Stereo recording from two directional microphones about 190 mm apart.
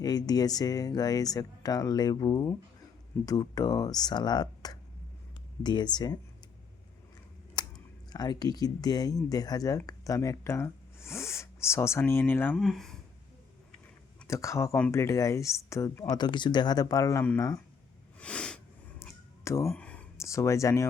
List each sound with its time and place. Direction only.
0.0 s speech: 20° left (ahead or behind)
7.6 s a sound: 20° left (ahead or behind)
8.1 s speech: 20° left (ahead or behind); by 13.0 s centre (ahead or behind)
14.3 s speech: 15° left (ahead or behind)
18.2 s snort: 5° left (ahead or behind)
19.6 s speech: 5° left (ahead or behind)